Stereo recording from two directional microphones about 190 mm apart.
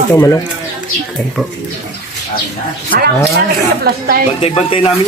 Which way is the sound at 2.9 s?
50° right (ahead or behind).